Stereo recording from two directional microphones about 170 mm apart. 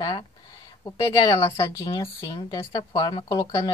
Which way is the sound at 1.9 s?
30° left (ahead or behind).